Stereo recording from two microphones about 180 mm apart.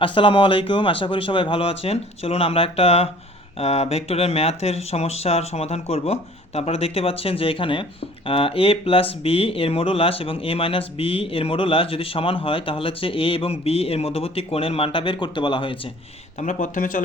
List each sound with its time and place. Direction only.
0.0 s a man's voice: 30° left (ahead or behind)
16.4 s speech: 45° left (ahead or behind)